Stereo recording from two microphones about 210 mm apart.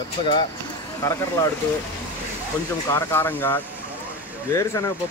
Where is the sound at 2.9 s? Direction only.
10° left (ahead or behind).